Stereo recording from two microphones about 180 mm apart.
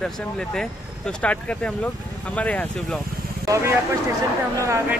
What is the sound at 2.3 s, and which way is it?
Speech, 5° left (ahead or behind).